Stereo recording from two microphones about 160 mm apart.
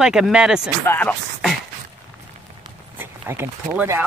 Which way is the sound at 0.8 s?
10° left (ahead or behind).